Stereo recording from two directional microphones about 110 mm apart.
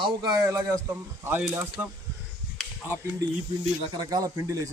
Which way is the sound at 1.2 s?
20° right (ahead or behind).